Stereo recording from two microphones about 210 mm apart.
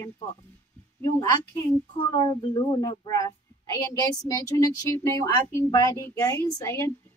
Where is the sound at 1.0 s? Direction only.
15° left (ahead or behind).